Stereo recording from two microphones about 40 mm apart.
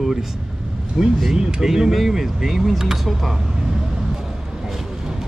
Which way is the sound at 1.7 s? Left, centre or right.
Centre.